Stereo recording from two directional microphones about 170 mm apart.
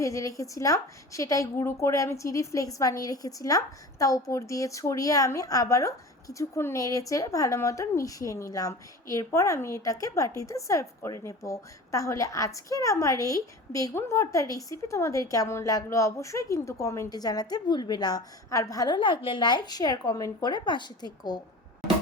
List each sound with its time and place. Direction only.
0.0 s a woman's voice: 20° left (ahead or behind)